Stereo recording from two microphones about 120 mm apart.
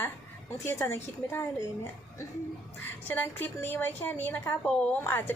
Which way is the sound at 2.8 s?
15° left (ahead or behind).